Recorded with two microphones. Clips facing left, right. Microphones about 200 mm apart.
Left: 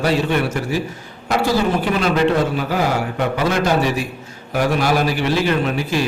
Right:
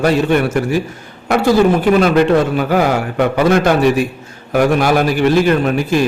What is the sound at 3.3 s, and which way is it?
A man's voice, 55° right (ahead or behind).